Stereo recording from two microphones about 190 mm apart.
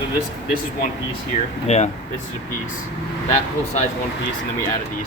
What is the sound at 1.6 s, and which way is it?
Speech, 35° left (ahead or behind).